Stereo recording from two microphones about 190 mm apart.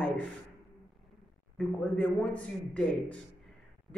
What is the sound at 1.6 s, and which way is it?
A man's voice, 5° left (ahead or behind).